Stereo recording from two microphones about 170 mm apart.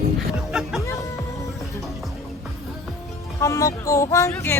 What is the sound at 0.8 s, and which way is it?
Music, 20° left (ahead or behind).